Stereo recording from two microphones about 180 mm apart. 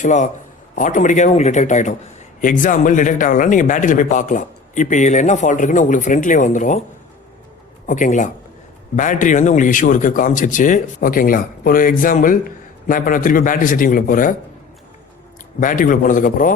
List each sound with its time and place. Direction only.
0.0 s a man's voice: 45° left (ahead or behind)
7.9 s a man's voice: 45° left (ahead or behind)
15.6 s a man's voice: 50° left (ahead or behind)